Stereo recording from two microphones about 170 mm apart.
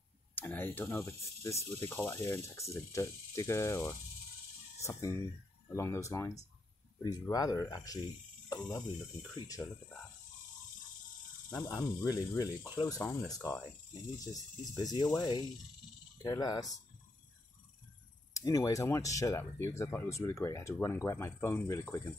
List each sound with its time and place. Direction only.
0.4 s speech: 10° left (ahead or behind)
11.5 s speech: 20° left (ahead or behind)
18.3 s speech: 20° left (ahead or behind)